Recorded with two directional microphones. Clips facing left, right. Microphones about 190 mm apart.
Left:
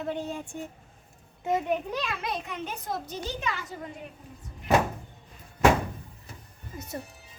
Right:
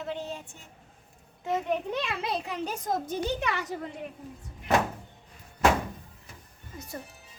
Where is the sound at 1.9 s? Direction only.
25° right (ahead or behind); by 3.2 s 45° right (ahead or behind).